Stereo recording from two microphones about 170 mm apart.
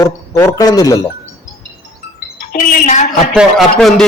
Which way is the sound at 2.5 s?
55° left (ahead or behind).